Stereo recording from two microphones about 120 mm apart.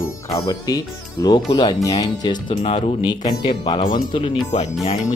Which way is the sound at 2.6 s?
50° left (ahead or behind).